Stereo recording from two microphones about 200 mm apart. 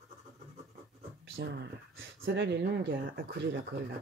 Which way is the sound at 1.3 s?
65° right (ahead or behind).